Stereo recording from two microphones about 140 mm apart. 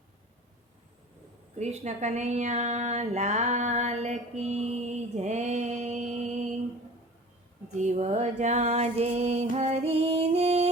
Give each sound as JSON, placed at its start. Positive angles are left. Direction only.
{"t": 1.5, "sound": "a woman's voice", "side_deg": -50}
{"t": 7.8, "sound": "music", "side_deg": -60}